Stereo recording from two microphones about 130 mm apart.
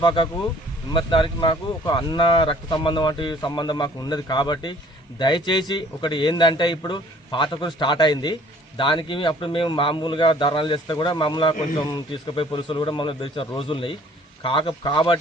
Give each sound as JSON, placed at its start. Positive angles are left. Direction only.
{"t": 0.0, "sound": "a man's voice", "side_deg": 40}